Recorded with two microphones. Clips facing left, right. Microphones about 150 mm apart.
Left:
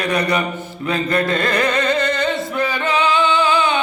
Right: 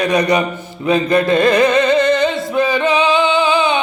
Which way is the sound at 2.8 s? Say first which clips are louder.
Right 1 dB; 15° right (ahead or behind).